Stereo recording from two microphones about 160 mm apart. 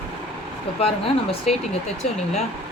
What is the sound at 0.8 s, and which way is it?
Speech, 35° left (ahead or behind).